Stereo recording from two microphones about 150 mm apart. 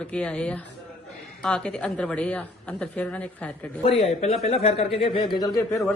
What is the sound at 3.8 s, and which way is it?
Speech, 40° left (ahead or behind).